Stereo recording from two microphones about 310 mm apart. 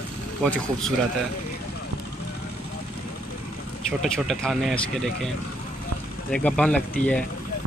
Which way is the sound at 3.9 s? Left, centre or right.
Centre.